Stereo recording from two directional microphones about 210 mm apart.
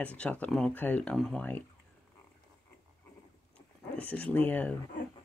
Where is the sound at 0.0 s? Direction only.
5° left (ahead or behind).